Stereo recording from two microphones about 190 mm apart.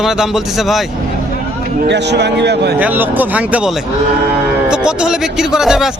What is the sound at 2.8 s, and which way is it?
Speech, 10° right (ahead or behind).